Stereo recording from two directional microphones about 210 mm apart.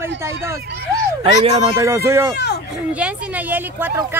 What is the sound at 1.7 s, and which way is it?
Speech, 15° right (ahead or behind).